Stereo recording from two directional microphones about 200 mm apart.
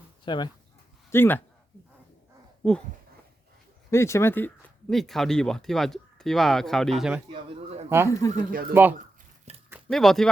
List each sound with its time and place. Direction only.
0.3 s speech: 20° left (ahead or behind)
1.1 s speech: 10° left (ahead or behind)
2.6 s speech: 5° left (ahead or behind)
3.9 s speech: 15° left (ahead or behind)
7.9 s speech: 10° right (ahead or behind)
8.1 s speech: 15° left (ahead or behind)
8.7 s speech: 10° right (ahead or behind)
9.9 s speech: centre (ahead or behind)